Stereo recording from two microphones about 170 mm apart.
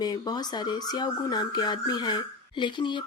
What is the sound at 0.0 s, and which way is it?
Speech, 25° left (ahead or behind).